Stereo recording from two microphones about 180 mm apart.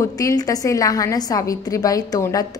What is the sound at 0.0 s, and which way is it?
A woman's voice, 20° left (ahead or behind).